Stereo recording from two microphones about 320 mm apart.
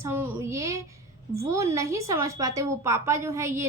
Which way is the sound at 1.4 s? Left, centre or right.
Centre.